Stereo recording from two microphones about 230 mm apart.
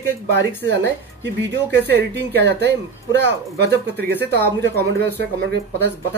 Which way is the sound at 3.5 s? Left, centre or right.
Right.